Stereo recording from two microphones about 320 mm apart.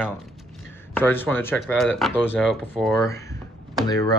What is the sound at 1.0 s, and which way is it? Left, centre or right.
Speech, centre.